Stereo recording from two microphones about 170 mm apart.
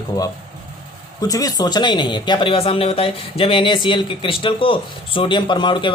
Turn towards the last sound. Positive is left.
turn(degrees=30)  # may be behind; listen again after turning